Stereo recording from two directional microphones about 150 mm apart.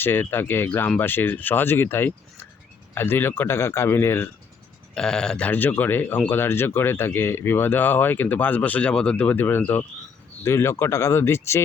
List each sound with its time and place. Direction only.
0.0 s speech: 15° left (ahead or behind)
4.9 s speech: 5° left (ahead or behind)